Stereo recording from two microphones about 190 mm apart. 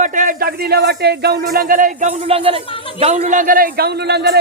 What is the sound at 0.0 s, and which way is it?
Speech, 40° right (ahead or behind).